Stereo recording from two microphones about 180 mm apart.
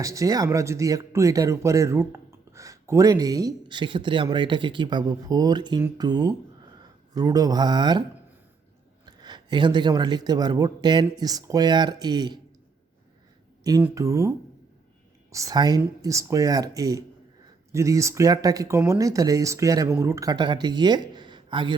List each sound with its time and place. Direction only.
0.0 s speech: 20° right (ahead or behind)
9.0 s speech: 25° right (ahead or behind)
13.8 s speech: 15° right (ahead or behind)